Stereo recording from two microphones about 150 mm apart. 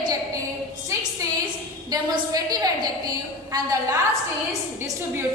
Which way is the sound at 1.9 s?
25° right (ahead or behind).